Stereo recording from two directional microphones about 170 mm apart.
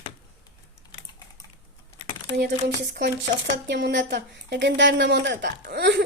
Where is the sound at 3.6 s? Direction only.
90° right.